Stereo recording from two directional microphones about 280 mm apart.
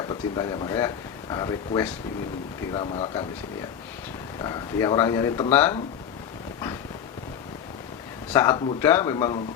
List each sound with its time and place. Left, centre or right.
0.0 s speech: centre
4.4 s speech: centre
8.3 s speech: centre